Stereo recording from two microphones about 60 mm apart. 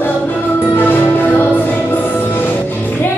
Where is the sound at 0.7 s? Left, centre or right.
Left.